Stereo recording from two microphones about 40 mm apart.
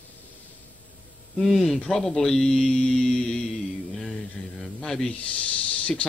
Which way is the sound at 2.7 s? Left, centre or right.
Centre.